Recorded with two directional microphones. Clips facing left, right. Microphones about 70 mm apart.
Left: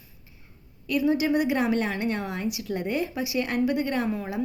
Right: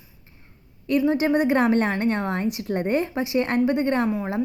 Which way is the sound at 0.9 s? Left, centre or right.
Right.